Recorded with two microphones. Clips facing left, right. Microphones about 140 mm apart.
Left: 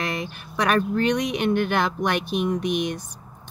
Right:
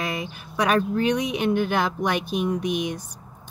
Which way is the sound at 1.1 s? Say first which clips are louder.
Even; 70° left (ahead or behind).